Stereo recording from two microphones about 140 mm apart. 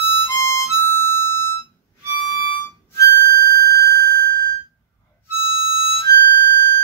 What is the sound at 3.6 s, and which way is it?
Sine wave, 25° left (ahead or behind).